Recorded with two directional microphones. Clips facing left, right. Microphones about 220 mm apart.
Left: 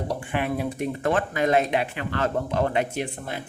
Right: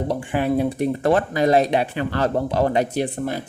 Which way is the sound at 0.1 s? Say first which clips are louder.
Right 6 dB; 30° right (ahead or behind).